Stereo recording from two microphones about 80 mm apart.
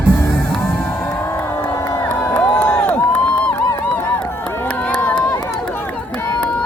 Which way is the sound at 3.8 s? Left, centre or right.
Left.